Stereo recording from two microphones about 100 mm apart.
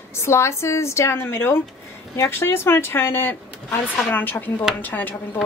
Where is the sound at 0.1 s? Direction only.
25° left (ahead or behind).